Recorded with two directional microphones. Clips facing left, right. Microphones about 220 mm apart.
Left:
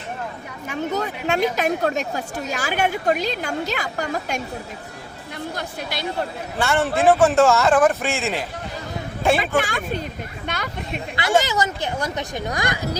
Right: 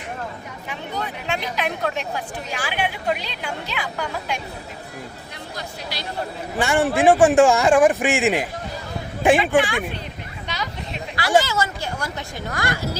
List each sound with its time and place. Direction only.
0.7 s speech: 45° left (ahead or behind)
5.5 s speech: 55° left (ahead or behind)
6.6 s speech: 15° right (ahead or behind)
9.6 s speech: 45° left (ahead or behind)
10.4 s a sound: 55° left (ahead or behind)
11.3 s speech: 15° left (ahead or behind)